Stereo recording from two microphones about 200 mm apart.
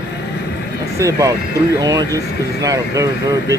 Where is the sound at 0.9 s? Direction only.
15° right (ahead or behind).